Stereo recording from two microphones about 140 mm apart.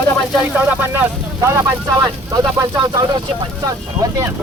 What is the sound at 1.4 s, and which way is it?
Speech, 20° right (ahead or behind).